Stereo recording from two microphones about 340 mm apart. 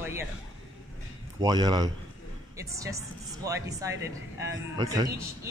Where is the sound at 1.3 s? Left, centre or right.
Centre.